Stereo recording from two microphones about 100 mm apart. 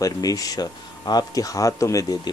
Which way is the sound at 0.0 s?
35° left (ahead or behind).